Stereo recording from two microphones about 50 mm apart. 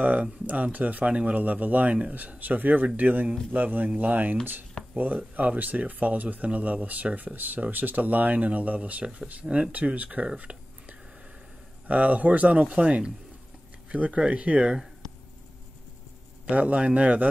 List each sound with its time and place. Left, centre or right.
0.0 s speech: right
16.4 s speech: right